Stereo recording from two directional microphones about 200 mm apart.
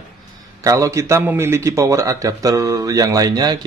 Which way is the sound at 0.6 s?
15° right (ahead or behind).